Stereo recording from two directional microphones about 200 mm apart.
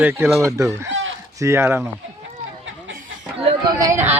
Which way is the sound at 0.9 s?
75° right (ahead or behind).